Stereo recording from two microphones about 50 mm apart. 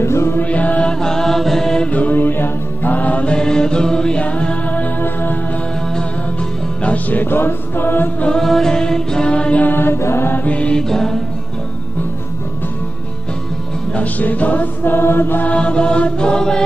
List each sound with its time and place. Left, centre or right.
0.0 s music: left
0.4 s music: left
0.9 s chant: centre
1.9 s mantra: left
3.3 s music: centre
5.0 s music: left
6.8 s music: left
8.4 s music: centre
9.6 s mantra: left
9.9 s mantra: left
10.3 s mantra: left
10.8 s music: centre
13.9 s music: left
15.4 s mantra: left